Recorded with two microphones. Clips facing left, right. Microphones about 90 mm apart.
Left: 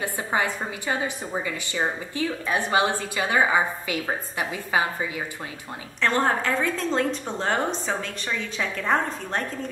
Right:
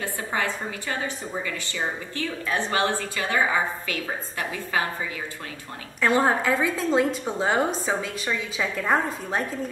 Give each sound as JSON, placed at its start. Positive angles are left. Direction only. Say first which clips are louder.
{"t": 0.0, "sound": "a woman's voice", "louder": "left 2 dB", "side_deg": 15}
{"t": 2.1, "sound": "a woman's voice", "louder": "left 2 dB", "side_deg": 15}
{"t": 5.9, "sound": "speech", "louder": "right 2 dB", "side_deg": -5}